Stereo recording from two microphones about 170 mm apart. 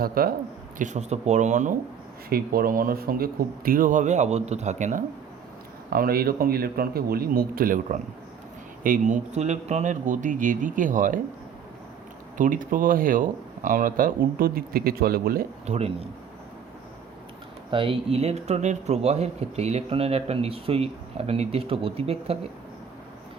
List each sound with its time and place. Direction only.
0.0 s speech: 60° right (ahead or behind)
0.8 s speech: 45° right (ahead or behind)
2.3 s speech: 60° right (ahead or behind)
5.9 s speech: 60° right (ahead or behind)
12.4 s speech: 50° right (ahead or behind)
15.6 s a man's voice: 40° right (ahead or behind)
17.7 s a man's voice: 30° right (ahead or behind)